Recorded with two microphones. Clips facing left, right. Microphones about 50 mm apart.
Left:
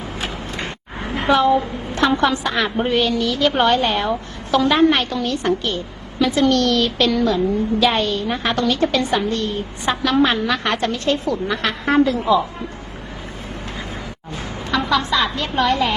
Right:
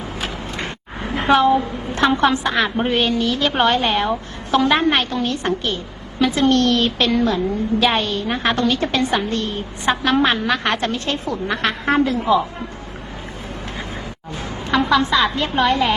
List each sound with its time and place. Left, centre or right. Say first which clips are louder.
1.1 s a woman's voice: right 1 dB; right
14.3 s a woman's voice: right 3 dB; right